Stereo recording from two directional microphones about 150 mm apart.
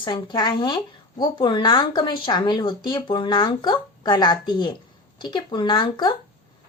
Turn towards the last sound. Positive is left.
turn(degrees=35)  # may be behind; listen again after turning